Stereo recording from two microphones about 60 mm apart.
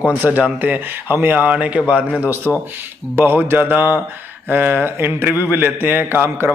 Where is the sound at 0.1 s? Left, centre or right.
Right.